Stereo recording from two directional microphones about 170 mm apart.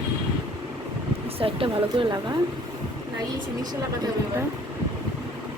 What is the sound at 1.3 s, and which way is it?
Speech, 30° right (ahead or behind).